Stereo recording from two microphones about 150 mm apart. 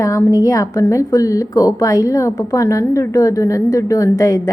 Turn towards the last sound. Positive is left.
turn(degrees=20)  # may be behind; listen again after turning